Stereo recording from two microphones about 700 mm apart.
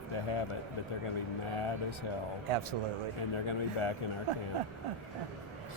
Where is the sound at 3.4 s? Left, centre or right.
Left.